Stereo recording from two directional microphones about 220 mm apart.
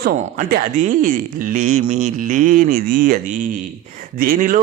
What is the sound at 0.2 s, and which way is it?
Speech, 40° right (ahead or behind).